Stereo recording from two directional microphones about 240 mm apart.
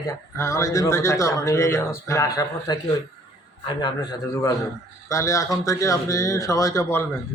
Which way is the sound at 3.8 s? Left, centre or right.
Centre.